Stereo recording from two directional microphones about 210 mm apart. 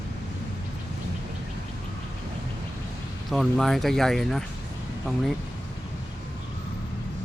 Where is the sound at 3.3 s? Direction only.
Centre (ahead or behind).